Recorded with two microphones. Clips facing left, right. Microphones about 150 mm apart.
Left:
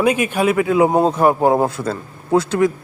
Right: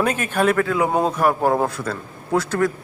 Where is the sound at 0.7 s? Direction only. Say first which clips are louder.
Left 5 dB; 25° left (ahead or behind).